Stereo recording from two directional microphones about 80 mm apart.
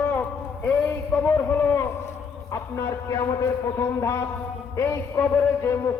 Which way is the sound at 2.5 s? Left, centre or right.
Left.